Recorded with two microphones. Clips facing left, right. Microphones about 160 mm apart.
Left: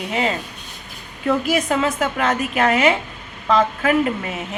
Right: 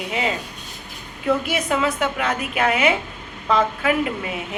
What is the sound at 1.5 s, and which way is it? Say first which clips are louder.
A woman's voice: left 2 dB; 45° left (ahead or behind).